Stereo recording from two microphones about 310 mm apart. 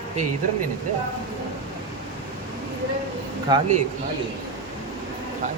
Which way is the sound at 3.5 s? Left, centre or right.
Centre.